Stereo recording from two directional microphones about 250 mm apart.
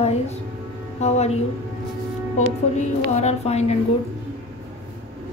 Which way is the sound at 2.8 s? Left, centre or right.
Left.